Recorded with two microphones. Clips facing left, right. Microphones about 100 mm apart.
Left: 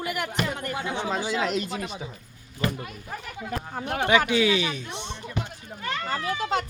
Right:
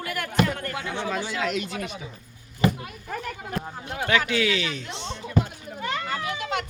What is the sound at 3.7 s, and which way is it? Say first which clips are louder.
Speech: left 4 dB; 65° left (ahead or behind).